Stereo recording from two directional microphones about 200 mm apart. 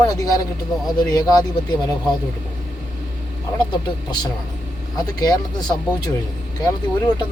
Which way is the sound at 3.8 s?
20° left (ahead or behind).